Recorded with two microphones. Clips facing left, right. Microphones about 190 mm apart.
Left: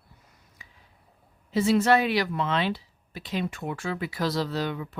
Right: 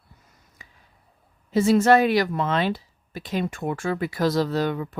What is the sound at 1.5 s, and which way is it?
Speech, 45° right (ahead or behind).